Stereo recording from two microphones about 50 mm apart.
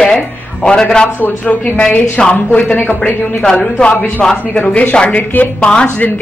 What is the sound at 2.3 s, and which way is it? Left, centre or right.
Speech, left.